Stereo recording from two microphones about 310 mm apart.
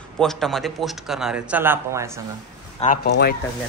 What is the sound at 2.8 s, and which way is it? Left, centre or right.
Speech, left.